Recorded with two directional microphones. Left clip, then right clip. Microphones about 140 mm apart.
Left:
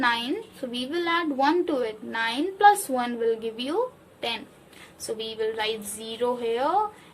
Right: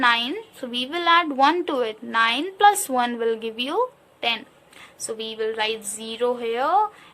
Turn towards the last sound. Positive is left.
turn(degrees=-35)  # may be behind; listen again after turning